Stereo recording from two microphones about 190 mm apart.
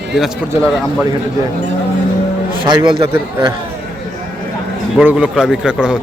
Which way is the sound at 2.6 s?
25° right (ahead or behind).